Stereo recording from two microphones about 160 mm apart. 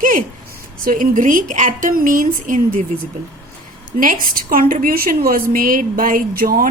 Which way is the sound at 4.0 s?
60° right (ahead or behind).